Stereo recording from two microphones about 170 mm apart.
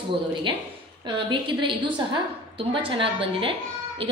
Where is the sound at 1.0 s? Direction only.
30° right (ahead or behind).